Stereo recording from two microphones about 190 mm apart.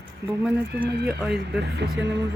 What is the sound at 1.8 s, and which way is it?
Speech, 65° right (ahead or behind).